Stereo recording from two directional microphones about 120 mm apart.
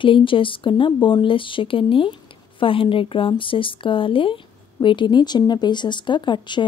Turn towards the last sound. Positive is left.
turn(degrees=40)  # may be behind; listen again after turning